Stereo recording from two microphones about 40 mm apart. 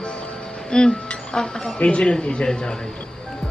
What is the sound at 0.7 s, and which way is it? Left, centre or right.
Music, left.